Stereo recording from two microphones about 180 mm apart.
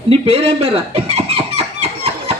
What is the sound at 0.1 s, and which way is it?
Fowl, 30° right (ahead or behind).